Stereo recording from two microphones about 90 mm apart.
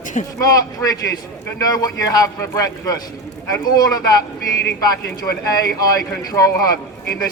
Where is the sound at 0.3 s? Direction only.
40° left (ahead or behind).